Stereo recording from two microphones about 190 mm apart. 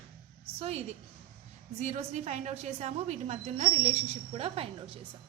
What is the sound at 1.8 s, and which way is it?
A woman's voice, 35° right (ahead or behind).